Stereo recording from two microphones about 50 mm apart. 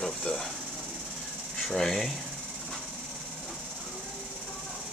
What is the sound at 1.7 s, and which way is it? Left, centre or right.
Speech, centre.